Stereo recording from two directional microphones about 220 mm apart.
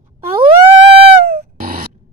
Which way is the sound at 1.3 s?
40° right (ahead or behind).